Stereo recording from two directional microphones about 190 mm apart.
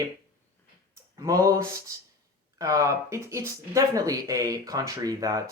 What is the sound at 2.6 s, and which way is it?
Speech, 15° right (ahead or behind).